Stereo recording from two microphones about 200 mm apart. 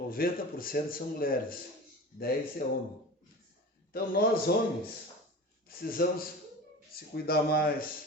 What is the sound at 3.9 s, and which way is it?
Speech, 50° left (ahead or behind).